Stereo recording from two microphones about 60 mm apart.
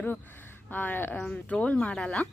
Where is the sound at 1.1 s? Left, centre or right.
Left.